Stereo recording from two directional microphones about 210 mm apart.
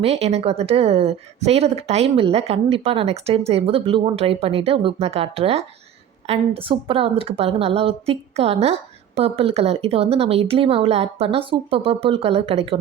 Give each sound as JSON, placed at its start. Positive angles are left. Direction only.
{"t": 0.0, "sound": "a woman's voice", "side_deg": -30}